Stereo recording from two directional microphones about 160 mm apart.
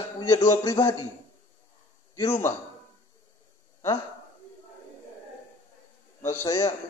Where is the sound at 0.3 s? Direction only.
20° left (ahead or behind).